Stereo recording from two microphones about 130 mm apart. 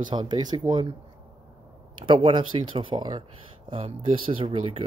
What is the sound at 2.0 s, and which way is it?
Speech, 40° right (ahead or behind).